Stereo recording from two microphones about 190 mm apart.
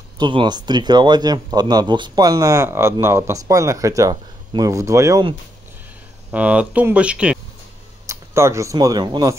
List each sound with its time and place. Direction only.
0.2 s speech: 25° right (ahead or behind)
6.3 s speech: 5° right (ahead or behind)